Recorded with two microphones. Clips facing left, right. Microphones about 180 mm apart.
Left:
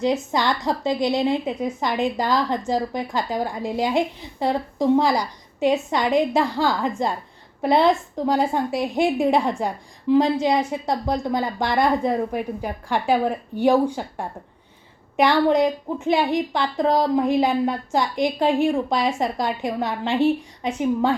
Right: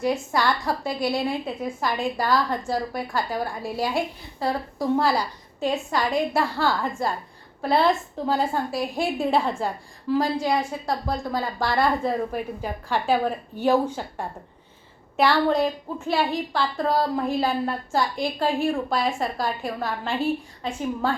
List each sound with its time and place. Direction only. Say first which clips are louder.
0.0 s a woman's voice: left 2 dB; 20° left (ahead or behind)